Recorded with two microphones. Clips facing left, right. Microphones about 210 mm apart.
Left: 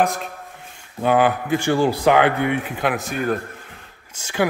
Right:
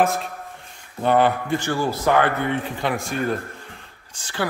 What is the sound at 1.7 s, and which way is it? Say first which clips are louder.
Speech: left 5 dB; 15° left (ahead or behind).